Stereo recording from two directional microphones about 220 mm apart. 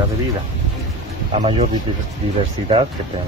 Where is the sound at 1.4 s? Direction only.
30° right (ahead or behind).